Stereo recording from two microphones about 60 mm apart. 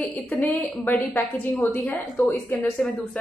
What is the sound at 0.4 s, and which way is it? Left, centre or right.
A woman's voice, left.